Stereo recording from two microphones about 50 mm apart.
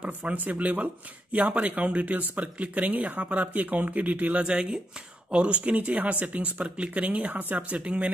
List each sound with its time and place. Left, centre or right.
0.3 s speech: right
4.4 s speech: centre